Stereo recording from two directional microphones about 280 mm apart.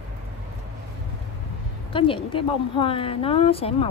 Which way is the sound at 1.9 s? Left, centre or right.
Centre.